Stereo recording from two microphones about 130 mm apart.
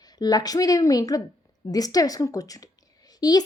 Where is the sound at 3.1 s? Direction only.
30° left (ahead or behind).